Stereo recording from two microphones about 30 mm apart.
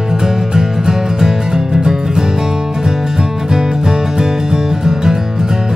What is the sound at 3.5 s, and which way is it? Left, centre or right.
Music, right.